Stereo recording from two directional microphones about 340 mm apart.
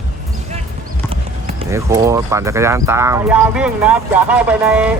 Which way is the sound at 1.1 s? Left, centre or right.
Centre.